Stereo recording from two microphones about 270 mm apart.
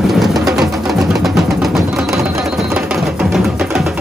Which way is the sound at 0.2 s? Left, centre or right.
Centre.